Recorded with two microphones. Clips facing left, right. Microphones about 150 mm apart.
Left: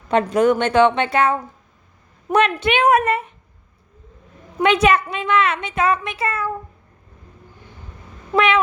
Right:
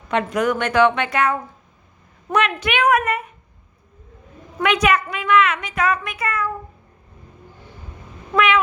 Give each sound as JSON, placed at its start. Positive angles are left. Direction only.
{"t": 0.1, "sound": "a woman's voice", "side_deg": 30}
{"t": 4.6, "sound": "a woman's voice", "side_deg": 30}